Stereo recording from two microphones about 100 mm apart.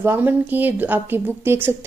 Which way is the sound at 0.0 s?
20° right (ahead or behind).